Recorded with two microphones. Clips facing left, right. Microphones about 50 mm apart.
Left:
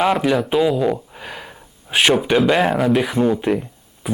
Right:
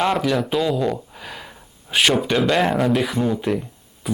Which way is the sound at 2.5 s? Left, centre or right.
Centre.